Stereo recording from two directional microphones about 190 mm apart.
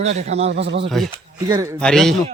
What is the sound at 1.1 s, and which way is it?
Speech, 20° right (ahead or behind).